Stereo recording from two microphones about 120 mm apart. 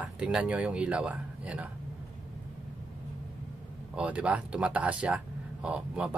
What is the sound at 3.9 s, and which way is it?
Speech, 10° right (ahead or behind).